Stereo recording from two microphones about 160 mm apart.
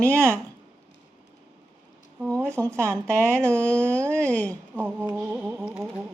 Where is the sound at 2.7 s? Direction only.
5° left (ahead or behind).